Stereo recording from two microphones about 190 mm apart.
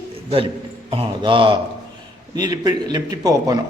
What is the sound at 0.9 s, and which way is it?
A man's voice, 25° right (ahead or behind).